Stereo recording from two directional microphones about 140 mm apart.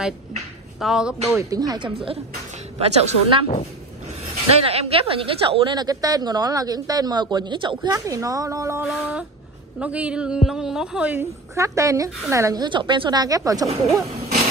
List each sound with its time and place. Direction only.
0.7 s speech: 5° right (ahead or behind)
1.5 s a woman's voice: 25° right (ahead or behind)
2.8 s a woman's voice: 50° right (ahead or behind)
4.5 s a woman's voice: 45° right (ahead or behind)
7.9 s a woman's voice: 25° right (ahead or behind)
8.8 s a woman's voice: 5° right (ahead or behind)
11.5 s a woman's voice: 20° right (ahead or behind)